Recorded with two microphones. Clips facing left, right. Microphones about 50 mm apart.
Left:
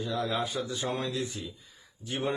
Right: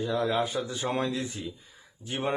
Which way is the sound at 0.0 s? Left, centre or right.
Right.